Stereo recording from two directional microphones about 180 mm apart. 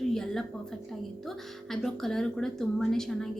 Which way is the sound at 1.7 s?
Centre (ahead or behind).